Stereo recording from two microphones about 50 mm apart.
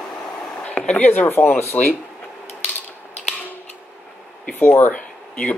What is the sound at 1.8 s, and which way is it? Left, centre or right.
Speech, left.